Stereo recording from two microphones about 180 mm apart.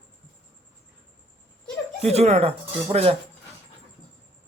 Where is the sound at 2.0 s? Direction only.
35° right (ahead or behind).